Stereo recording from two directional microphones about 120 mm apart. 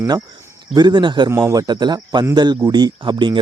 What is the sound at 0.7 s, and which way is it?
Speech, 35° right (ahead or behind).